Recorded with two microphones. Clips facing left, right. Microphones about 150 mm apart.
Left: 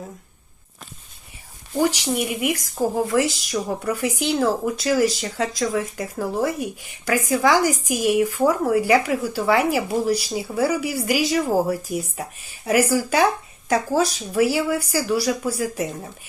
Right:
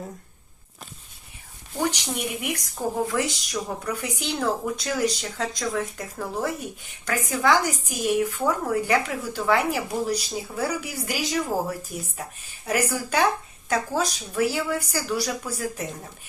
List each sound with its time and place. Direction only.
1.9 s a woman's voice: 5° left (ahead or behind)
2.8 s speech: 35° left (ahead or behind)
3.2 s a woman's voice: 5° left (ahead or behind)